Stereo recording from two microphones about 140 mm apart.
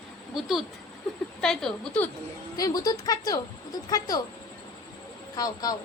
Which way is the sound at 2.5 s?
25° left (ahead or behind).